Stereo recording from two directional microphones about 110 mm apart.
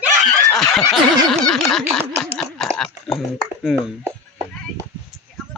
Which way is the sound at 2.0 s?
20° right (ahead or behind).